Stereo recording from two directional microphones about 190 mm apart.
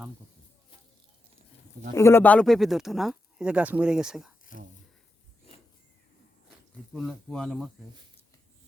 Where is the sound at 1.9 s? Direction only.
15° left (ahead or behind); by 4.3 s 5° right (ahead or behind).